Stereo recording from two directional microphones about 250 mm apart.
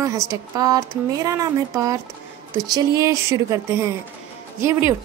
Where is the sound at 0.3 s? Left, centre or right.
Centre.